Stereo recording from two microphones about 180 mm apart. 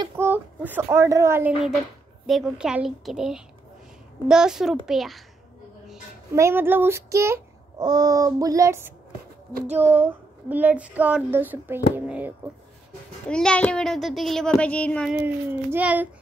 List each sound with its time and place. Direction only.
0.0 s speech: 10° right (ahead or behind)
2.2 s a child's voice: centre (ahead or behind)
6.3 s child singing: 15° right (ahead or behind)
13.3 s a child's voice: 5° left (ahead or behind)
15.0 s child singing: 10° right (ahead or behind)